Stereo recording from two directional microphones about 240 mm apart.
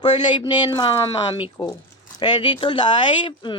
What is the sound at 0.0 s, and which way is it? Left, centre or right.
Speech, centre.